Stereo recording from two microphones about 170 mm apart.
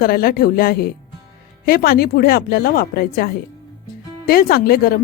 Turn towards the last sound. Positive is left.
turn(degrees=60)  # may be behind; listen again after turning